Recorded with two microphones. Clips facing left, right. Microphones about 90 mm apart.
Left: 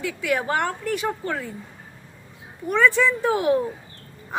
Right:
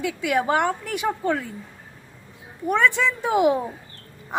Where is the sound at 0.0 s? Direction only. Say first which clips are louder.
Right 2 dB; 15° right (ahead or behind).